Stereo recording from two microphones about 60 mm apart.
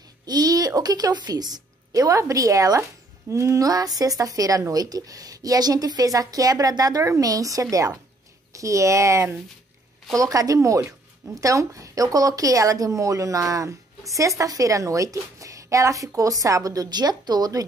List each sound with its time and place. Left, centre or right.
0.4 s a woman's voice: right
2.8 s speech: right
8.5 s a woman's voice: right
10.1 s a woman's voice: right
16.2 s speech: right